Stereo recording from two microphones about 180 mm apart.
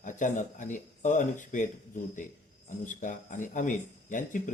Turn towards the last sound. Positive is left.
turn(degrees=45)  # may be behind; listen again after turning